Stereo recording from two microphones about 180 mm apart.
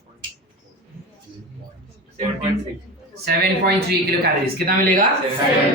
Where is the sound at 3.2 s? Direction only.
60° right (ahead or behind).